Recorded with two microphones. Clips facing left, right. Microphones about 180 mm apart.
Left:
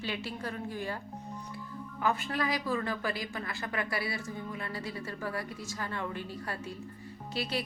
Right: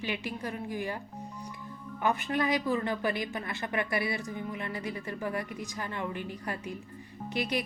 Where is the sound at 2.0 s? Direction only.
20° right (ahead or behind).